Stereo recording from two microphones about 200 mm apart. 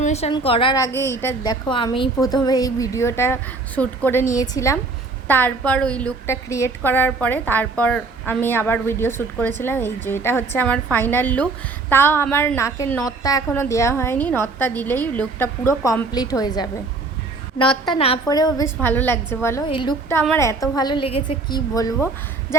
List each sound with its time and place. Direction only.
0.0 s a woman's voice: 30° left (ahead or behind); by 1.5 s 10° left (ahead or behind)
1.6 s a woman's voice: 25° left (ahead or behind)
17.8 s a woman's voice: 25° left (ahead or behind)
19.6 s a woman's voice: 25° left (ahead or behind)